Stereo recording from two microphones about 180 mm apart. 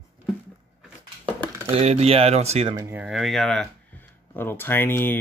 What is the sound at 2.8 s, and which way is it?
Speech, 15° right (ahead or behind).